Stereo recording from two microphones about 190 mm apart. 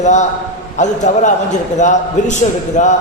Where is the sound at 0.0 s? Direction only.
40° left (ahead or behind).